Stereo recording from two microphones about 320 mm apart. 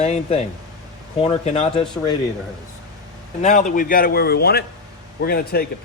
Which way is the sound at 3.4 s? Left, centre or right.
Left.